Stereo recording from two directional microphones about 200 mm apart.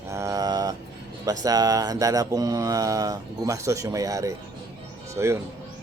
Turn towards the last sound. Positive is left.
turn(degrees=-15)  # may be behind; listen again after turning